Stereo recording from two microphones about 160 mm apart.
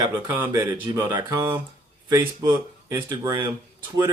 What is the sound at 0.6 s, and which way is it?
Speech, 25° right (ahead or behind).